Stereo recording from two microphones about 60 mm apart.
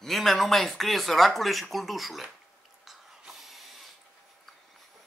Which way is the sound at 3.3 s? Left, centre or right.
Centre.